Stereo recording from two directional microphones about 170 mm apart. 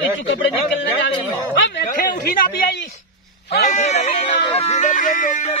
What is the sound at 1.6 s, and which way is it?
Speech, 65° left (ahead or behind).